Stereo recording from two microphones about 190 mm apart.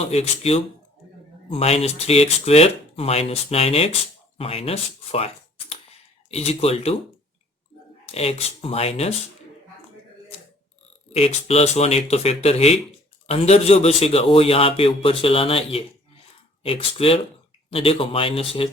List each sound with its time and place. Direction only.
0.0 s a man's voice: 35° left (ahead or behind)
8.0 s a man's voice: 30° left (ahead or behind)
11.1 s a man's voice: 30° left (ahead or behind)